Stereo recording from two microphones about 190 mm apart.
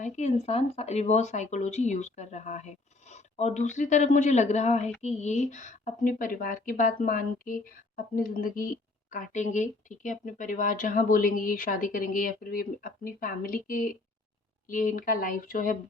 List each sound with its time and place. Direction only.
0.0 s a woman's voice: 35° left (ahead or behind)